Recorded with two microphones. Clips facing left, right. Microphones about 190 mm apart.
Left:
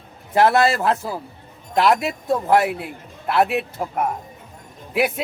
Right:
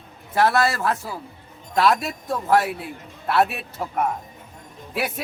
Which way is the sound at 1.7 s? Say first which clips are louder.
Left 2 dB; 20° left (ahead or behind).